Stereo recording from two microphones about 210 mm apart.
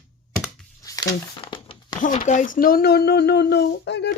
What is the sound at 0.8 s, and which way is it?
Crumpling, 15° left (ahead or behind).